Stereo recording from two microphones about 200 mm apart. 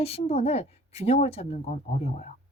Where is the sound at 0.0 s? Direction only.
30° left (ahead or behind).